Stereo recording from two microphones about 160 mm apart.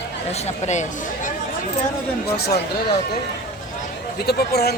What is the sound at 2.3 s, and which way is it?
Speech, 90° left.